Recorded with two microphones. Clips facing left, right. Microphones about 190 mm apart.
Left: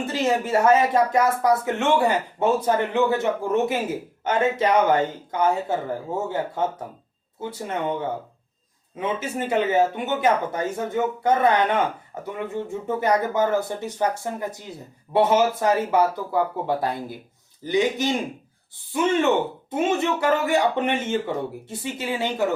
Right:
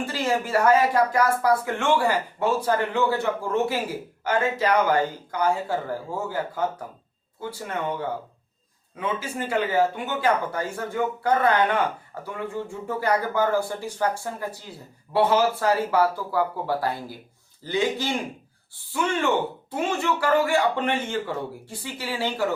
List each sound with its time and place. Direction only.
0.0 s speech: 20° left (ahead or behind)
9.0 s speech: 20° left (ahead or behind)